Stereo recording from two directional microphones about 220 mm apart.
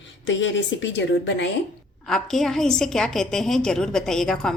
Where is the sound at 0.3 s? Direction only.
55° left (ahead or behind).